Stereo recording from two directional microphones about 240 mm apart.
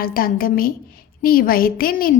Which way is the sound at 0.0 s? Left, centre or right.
Left.